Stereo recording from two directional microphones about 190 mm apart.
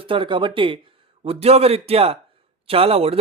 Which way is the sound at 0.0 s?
25° right (ahead or behind).